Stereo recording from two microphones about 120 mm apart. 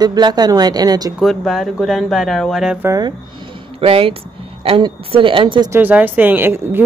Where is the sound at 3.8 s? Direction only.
50° right (ahead or behind).